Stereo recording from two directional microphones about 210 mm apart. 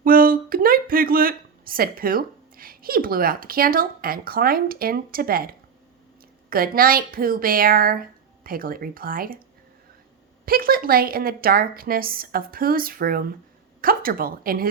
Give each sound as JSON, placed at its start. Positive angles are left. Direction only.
{"t": 0.0, "sound": "a woman's voice", "side_deg": -40}
{"t": 10.4, "sound": "a woman's voice", "side_deg": -45}